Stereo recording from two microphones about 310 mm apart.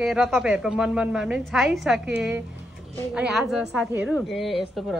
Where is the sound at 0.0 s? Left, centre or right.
Centre.